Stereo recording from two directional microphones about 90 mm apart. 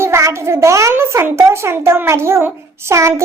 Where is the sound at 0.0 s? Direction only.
30° right (ahead or behind).